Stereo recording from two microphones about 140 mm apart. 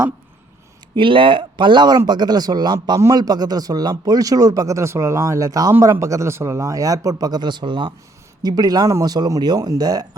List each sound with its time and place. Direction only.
0.9 s speech: 35° right (ahead or behind)